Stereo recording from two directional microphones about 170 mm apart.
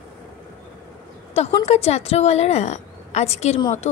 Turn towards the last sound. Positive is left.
turn(degrees=40)  # may be behind; listen again after turning